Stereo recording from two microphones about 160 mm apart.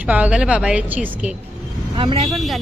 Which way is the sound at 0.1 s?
10° right (ahead or behind).